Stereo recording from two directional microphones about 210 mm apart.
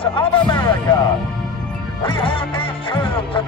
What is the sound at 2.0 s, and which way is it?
Music, 25° left (ahead or behind).